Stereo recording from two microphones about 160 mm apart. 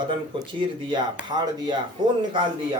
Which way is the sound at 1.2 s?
25° right (ahead or behind).